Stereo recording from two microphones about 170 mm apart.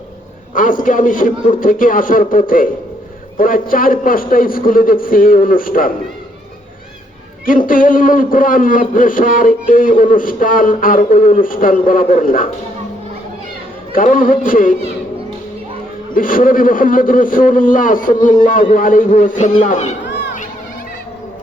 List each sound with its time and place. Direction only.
0.5 s a man's voice: 50° left (ahead or behind)
7.7 s a man's voice: 55° left (ahead or behind)
13.9 s a man's voice: 55° left (ahead or behind)
16.1 s a man's voice: 55° left (ahead or behind)